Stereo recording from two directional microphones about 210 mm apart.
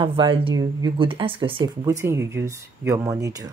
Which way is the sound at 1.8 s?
15° right (ahead or behind).